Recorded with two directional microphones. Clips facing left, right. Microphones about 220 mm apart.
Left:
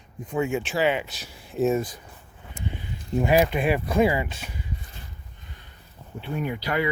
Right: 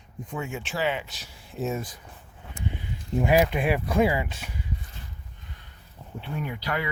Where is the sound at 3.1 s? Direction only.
10° right (ahead or behind).